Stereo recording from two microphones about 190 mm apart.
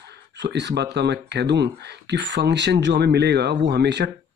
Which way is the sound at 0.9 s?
60° right (ahead or behind).